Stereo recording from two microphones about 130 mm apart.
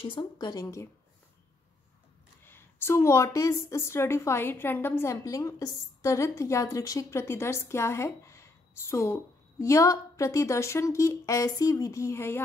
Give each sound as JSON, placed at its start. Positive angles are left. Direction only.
{"t": 0.0, "sound": "speech", "side_deg": 40}
{"t": 2.4, "sound": "a woman's voice", "side_deg": 15}